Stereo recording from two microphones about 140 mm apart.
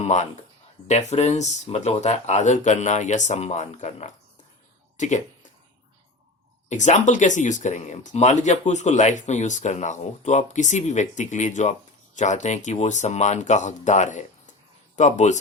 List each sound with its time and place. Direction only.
0.0 s speech: 55° left (ahead or behind)
6.7 s speech: 60° left (ahead or behind)